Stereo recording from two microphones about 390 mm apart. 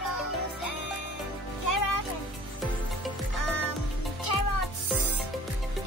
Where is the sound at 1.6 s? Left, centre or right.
Left.